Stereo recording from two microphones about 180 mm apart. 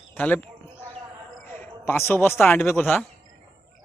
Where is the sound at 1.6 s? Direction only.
10° left (ahead or behind).